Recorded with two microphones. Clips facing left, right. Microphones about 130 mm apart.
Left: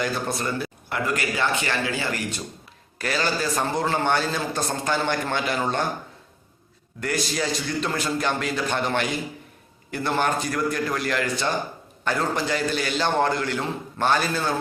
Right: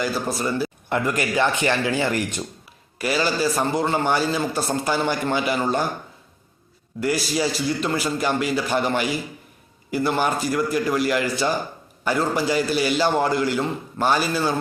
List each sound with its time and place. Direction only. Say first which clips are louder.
0.0 s a man's voice: right 2 dB; 5° right (ahead or behind)
0.9 s a man's voice: right 2 dB; 20° right (ahead or behind); by 5.8 s 5° right (ahead or behind)
7.0 s a man's voice: right 4 dB; 5° right (ahead or behind)